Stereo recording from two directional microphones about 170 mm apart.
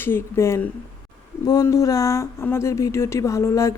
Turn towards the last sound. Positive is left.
turn(degrees=15)  # may be behind; listen again after turning